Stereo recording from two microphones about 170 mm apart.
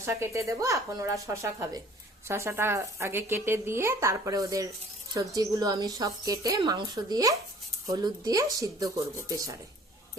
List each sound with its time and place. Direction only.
0.0 s speech: 15° right (ahead or behind)